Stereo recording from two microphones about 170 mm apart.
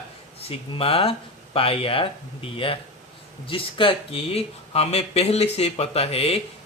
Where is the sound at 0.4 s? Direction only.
35° left (ahead or behind).